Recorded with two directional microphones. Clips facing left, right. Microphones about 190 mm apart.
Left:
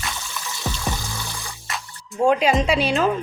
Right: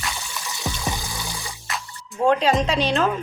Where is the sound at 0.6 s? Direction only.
15° right (ahead or behind).